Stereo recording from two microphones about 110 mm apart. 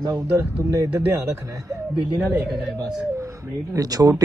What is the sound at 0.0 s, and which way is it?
Speech, 25° right (ahead or behind).